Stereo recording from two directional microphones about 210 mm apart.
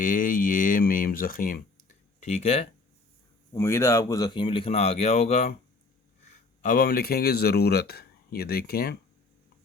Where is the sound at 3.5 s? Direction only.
15° left (ahead or behind); by 5.6 s 30° left (ahead or behind).